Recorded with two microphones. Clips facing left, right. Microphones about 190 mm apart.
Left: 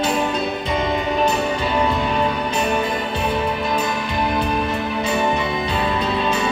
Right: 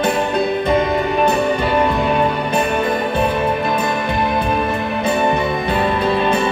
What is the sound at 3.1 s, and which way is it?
Music, 55° right (ahead or behind).